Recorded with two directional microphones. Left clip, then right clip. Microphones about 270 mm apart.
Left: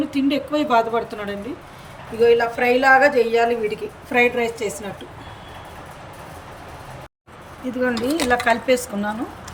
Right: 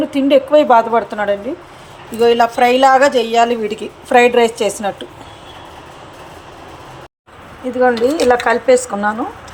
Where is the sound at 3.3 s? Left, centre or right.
Right.